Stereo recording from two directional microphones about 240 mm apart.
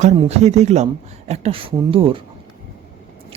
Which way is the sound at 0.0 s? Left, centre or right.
Right.